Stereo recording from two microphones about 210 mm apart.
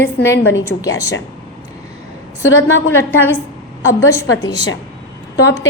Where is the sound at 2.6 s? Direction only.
65° left (ahead or behind).